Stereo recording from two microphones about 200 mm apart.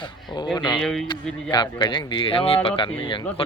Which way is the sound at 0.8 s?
Centre (ahead or behind).